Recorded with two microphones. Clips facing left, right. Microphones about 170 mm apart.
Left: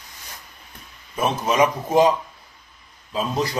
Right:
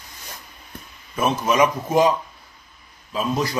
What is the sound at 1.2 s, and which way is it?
Speech, 25° left (ahead or behind).